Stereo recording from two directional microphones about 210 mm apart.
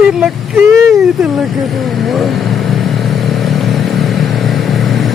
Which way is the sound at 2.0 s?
Centre (ahead or behind).